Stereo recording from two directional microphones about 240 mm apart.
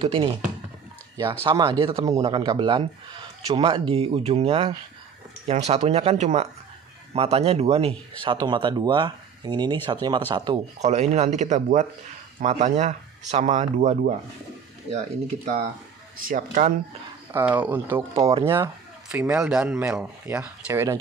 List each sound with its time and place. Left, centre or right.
0.0 s speech: right
16.3 s speech: right
17.3 s speech: centre